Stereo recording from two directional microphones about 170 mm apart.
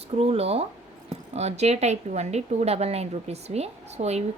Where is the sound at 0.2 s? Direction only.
35° right (ahead or behind).